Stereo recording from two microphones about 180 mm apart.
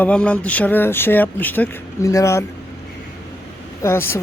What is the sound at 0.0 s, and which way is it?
Speech, 5° left (ahead or behind).